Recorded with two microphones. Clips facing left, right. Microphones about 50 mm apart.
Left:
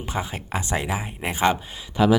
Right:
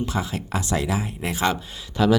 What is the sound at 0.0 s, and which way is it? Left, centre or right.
Speech, left.